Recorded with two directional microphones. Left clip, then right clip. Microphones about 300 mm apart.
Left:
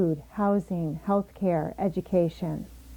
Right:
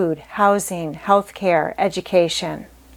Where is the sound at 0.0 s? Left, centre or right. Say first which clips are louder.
Right 10 dB; centre.